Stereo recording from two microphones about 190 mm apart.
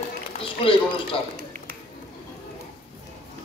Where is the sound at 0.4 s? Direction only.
30° left (ahead or behind).